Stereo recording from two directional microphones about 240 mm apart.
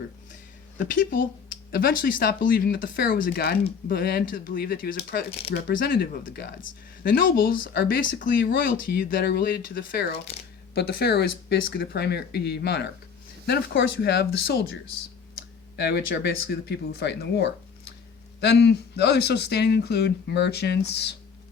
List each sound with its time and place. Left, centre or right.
0.9 s speech: left